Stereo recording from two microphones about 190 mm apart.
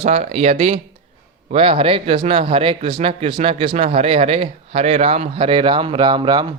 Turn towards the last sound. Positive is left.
turn(degrees=-25)  # may be behind; listen again after turning